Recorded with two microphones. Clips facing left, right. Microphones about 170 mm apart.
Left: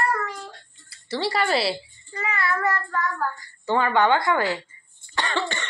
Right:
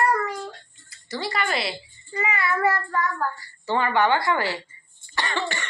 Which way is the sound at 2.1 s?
5° right (ahead or behind).